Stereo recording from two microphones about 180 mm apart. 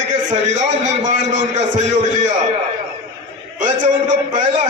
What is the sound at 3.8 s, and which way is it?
Speech, 45° right (ahead or behind).